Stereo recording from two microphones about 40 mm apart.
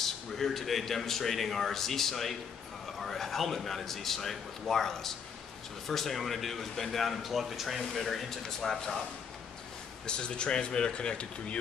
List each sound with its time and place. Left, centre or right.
0.0 s speech: centre
10.0 s speech: left